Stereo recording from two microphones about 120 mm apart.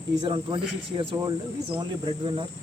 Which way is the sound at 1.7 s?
45° right (ahead or behind).